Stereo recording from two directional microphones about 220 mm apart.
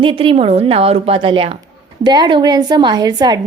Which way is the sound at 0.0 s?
25° right (ahead or behind).